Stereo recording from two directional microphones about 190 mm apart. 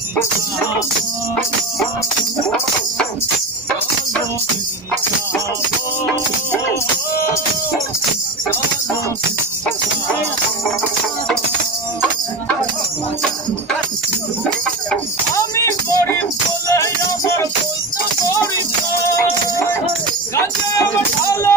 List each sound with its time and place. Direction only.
14.9 s music: 15° left (ahead or behind)
21.3 s music: 15° left (ahead or behind)